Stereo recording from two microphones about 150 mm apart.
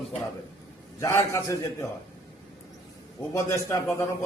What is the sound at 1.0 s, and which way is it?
Speech, 20° left (ahead or behind).